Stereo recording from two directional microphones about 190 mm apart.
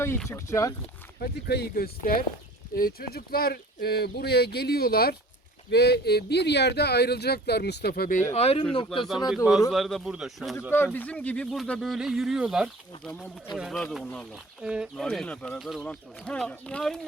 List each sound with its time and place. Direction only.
0.3 s speech: 15° left (ahead or behind)
1.2 s speech: 55° left (ahead or behind)
8.3 s speech: 35° left (ahead or behind)
9.3 s speech: 5° right (ahead or behind)
10.7 s speech: 10° left (ahead or behind)